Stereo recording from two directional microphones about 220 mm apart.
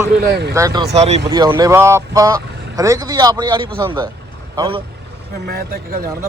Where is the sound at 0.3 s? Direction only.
50° right (ahead or behind).